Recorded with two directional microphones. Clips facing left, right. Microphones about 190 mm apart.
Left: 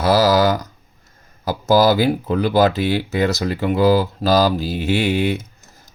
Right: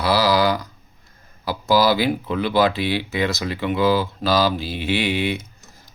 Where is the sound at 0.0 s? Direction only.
45° left (ahead or behind).